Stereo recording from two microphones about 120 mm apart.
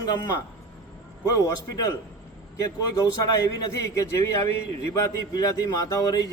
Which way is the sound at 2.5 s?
25° left (ahead or behind).